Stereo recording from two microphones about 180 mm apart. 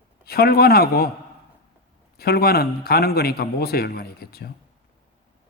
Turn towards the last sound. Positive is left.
turn(degrees=60)  # may be behind; listen again after turning